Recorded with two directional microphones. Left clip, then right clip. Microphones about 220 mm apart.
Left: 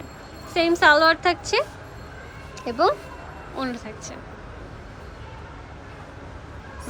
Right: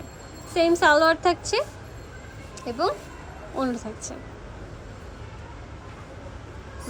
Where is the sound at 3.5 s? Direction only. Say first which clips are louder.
Right 2 dB; 15° right (ahead or behind).